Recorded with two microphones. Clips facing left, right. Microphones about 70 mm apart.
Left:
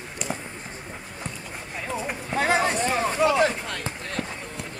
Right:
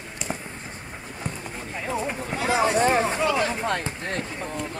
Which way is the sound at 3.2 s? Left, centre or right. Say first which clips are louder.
Left 3 dB; centre.